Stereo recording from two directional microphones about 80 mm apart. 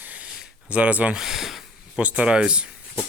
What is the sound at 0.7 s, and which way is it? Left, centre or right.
Speech, centre.